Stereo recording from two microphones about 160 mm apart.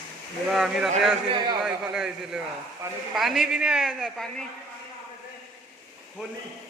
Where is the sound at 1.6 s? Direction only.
5° right (ahead or behind).